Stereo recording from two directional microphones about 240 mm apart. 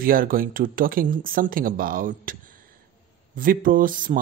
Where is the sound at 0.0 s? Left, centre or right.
Right.